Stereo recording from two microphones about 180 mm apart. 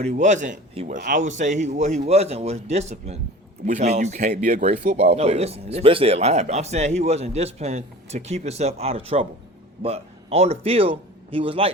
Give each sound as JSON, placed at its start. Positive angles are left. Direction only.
{"t": 0.0, "sound": "a man's voice", "side_deg": -40}
{"t": 0.7, "sound": "speech", "side_deg": -35}
{"t": 0.9, "sound": "a man's voice", "side_deg": -50}